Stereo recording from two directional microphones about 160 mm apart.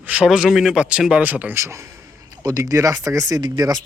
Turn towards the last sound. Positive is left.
turn(degrees=-25)  # may be behind; listen again after turning